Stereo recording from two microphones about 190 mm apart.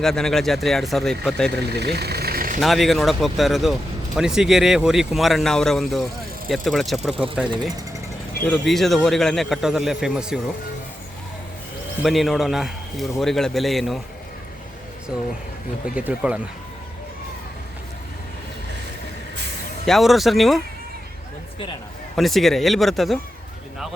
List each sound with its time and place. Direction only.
0.0 s speech: centre (ahead or behind)
1.7 s vehicle: 60° right (ahead or behind)
2.6 s speech: centre (ahead or behind)
12.0 s speech: centre (ahead or behind)
16.0 s speech: 5° right (ahead or behind)
19.8 s speech: centre (ahead or behind)
22.1 s speech: centre (ahead or behind)